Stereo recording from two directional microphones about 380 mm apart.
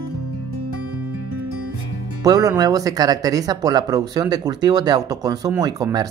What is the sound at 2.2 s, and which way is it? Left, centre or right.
Speech, centre.